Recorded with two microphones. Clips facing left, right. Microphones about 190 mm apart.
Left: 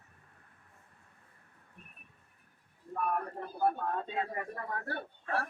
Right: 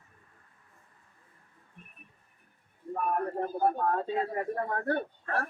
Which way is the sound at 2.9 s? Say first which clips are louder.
Right 4 dB; 50° right (ahead or behind).